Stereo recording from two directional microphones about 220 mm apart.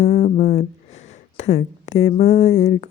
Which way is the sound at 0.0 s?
30° left (ahead or behind).